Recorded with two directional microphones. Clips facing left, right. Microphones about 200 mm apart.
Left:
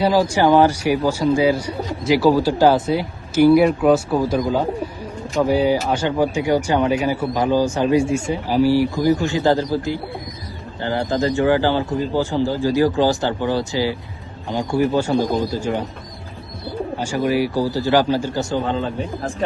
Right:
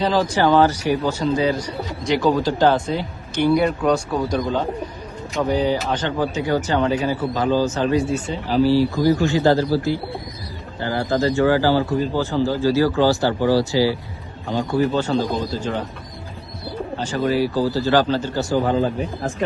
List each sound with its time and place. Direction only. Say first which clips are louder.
0.0 s speech: left 2 dB; 10° left (ahead or behind)
5.4 s speech: left 3 dB; 10° left (ahead or behind)
17.0 s speech: even; 10° left (ahead or behind)
18.6 s a man's voice: right 3 dB; 35° right (ahead or behind)